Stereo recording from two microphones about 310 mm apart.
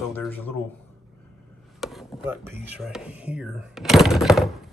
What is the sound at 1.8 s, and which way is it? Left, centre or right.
Chopping, centre.